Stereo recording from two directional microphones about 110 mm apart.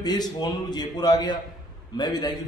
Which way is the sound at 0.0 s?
40° left (ahead or behind).